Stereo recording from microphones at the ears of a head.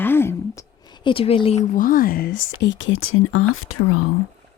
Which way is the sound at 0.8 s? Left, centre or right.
Left.